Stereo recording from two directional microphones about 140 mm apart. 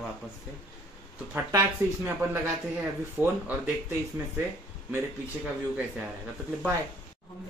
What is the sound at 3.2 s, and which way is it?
Speech, 15° right (ahead or behind).